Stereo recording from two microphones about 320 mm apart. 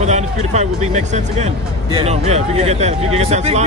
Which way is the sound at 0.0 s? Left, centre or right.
Right.